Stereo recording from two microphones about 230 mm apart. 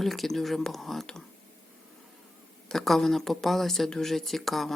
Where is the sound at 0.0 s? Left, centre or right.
Centre.